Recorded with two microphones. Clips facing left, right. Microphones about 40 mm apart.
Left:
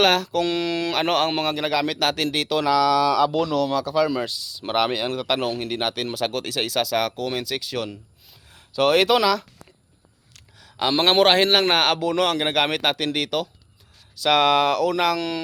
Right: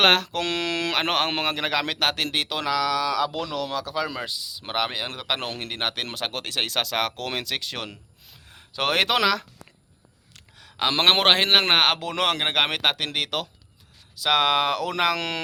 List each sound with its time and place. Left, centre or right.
0.0 s speech: right
0.4 s speech: right
0.9 s speech: right
1.9 s speech: right
4.6 s speech: centre
5.0 s speech: centre
5.4 s speech: right
8.4 s a sound: right
9.2 s speech: right
10.3 s a sound: right
10.9 s speech: right
11.7 s speech: right
12.5 s speech: right
15.1 s speech: right